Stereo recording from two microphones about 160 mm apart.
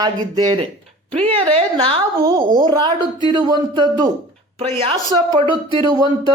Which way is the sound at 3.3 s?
25° right (ahead or behind).